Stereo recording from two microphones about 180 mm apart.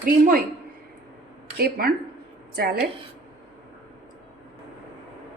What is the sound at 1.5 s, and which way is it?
A woman's voice, 55° right (ahead or behind).